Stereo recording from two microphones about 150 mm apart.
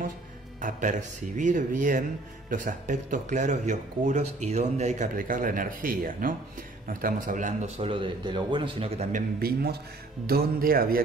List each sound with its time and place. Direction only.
0.6 s speech: 60° right (ahead or behind); by 9.1 s 40° right (ahead or behind)
9.1 s a man's voice: 90° right